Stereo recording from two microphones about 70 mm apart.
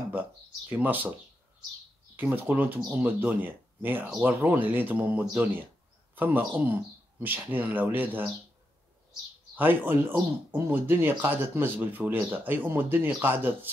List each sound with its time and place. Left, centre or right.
0.1 s speech: right
2.1 s speech: right
9.6 s speech: right